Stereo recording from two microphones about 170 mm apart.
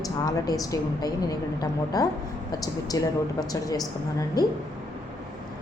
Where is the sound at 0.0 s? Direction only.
20° left (ahead or behind).